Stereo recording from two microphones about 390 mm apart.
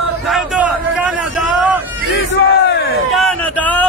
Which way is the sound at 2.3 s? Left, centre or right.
Left.